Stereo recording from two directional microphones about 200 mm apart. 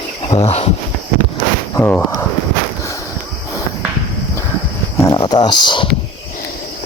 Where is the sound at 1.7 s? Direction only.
15° left (ahead or behind).